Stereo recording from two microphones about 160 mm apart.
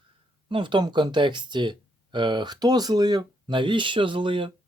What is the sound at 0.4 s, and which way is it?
Speech, 30° right (ahead or behind).